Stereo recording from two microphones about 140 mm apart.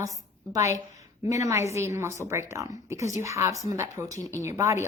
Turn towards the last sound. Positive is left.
turn(degrees=-20)  # may be behind; listen again after turning